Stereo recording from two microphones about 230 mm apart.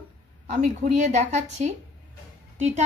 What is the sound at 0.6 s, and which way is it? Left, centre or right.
A woman's voice, right.